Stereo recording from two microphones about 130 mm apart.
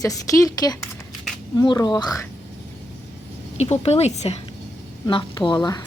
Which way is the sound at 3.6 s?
55° left (ahead or behind).